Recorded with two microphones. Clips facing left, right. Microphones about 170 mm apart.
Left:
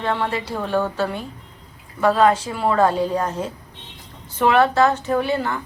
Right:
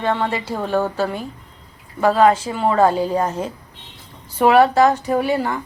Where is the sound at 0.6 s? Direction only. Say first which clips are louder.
Right 2 dB; 5° right (ahead or behind).